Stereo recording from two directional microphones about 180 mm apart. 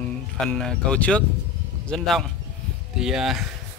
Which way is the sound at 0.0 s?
5° left (ahead or behind).